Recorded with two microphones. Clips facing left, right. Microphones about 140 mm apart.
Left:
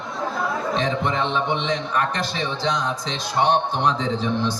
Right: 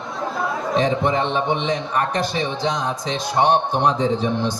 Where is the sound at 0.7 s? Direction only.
15° right (ahead or behind).